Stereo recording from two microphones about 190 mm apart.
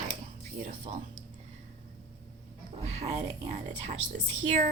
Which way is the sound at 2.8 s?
35° right (ahead or behind).